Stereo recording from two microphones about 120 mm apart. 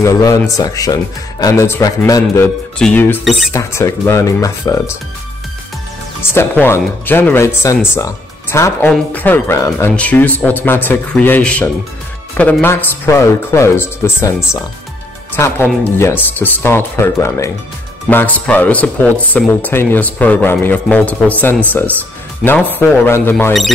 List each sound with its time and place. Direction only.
0.0 s a man's voice: 25° left (ahead or behind)
2.8 s speech: 15° left (ahead or behind)
3.3 s speech: centre (ahead or behind)
3.5 s a man's voice: 25° left (ahead or behind)
6.2 s a man's voice: 20° left (ahead or behind)
9.9 s a man's voice: 10° left (ahead or behind)